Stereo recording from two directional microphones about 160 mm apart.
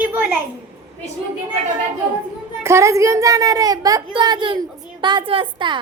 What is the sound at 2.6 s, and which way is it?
A child's voice, 20° right (ahead or behind).